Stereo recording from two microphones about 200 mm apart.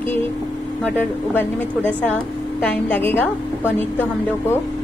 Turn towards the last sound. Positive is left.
turn(degrees=10)  # may be behind; listen again after turning